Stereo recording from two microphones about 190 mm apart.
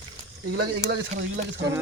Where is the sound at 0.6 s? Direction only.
65° right (ahead or behind).